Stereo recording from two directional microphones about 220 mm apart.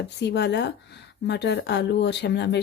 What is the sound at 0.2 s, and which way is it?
Speech, 50° left (ahead or behind).